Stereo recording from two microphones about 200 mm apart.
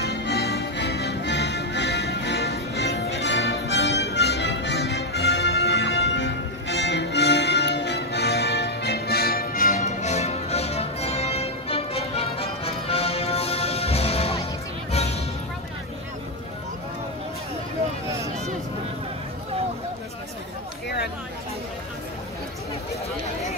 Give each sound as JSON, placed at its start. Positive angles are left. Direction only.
{"t": 0.0, "sound": "music", "side_deg": 60}